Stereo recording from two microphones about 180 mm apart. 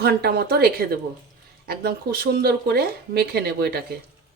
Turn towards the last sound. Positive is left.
turn(degrees=-60)  # may be behind; listen again after turning